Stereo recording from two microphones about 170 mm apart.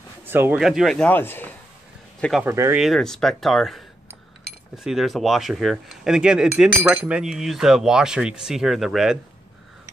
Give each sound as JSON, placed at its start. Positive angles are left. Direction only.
{"t": 0.3, "sound": "speech", "side_deg": -10}
{"t": 2.4, "sound": "speech", "side_deg": -15}
{"t": 2.8, "sound": "speech", "side_deg": 0}